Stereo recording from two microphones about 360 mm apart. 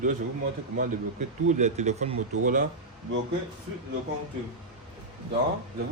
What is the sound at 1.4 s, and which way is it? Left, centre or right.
Speech, centre.